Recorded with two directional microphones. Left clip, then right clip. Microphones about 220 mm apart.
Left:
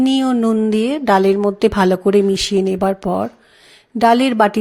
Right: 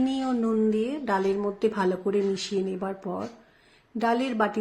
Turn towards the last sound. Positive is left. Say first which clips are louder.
# left 12 dB
turn(degrees=40)  # may be behind; listen again after turning